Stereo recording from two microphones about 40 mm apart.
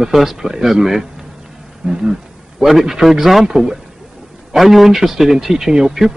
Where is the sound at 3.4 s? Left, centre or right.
Centre.